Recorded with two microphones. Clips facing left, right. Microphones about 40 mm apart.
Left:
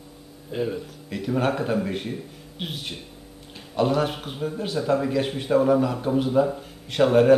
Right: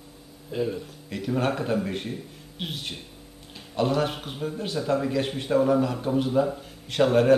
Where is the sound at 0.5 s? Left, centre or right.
Centre.